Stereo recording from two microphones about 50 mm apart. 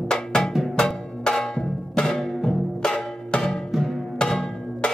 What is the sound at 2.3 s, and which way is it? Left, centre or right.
Music, centre.